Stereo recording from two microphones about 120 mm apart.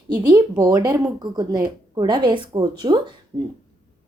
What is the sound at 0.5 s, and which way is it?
A woman's voice, 30° right (ahead or behind).